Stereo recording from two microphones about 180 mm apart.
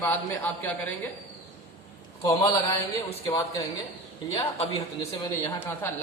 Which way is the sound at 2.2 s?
15° left (ahead or behind).